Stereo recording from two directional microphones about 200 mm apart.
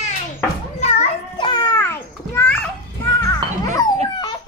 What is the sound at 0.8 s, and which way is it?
Children playing, 30° left (ahead or behind).